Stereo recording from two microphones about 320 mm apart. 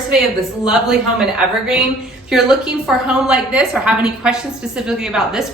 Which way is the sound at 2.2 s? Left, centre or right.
Centre.